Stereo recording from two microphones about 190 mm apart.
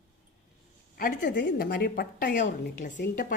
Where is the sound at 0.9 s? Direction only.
55° left (ahead or behind).